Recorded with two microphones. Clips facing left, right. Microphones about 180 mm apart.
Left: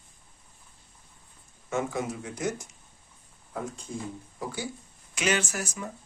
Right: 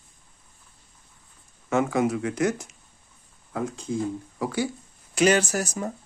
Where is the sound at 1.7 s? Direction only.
90° right.